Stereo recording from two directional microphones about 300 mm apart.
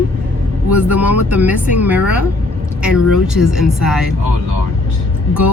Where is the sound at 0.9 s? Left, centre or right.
Centre.